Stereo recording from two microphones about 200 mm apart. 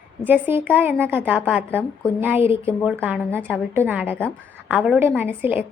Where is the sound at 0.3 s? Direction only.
10° right (ahead or behind).